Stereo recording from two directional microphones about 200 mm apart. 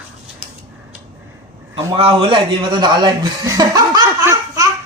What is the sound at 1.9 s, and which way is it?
Chuckle, 25° right (ahead or behind).